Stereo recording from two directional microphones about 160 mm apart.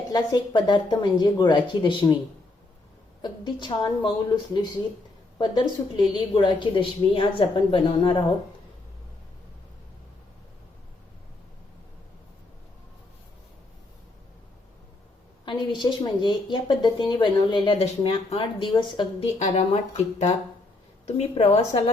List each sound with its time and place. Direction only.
0.1 s a woman's voice: 25° left (ahead or behind)
3.2 s a woman's voice: 30° left (ahead or behind)
5.4 s a woman's voice: 30° left (ahead or behind)
15.4 s a woman's voice: 30° left (ahead or behind)
19.4 s a woman's voice: 45° left (ahead or behind)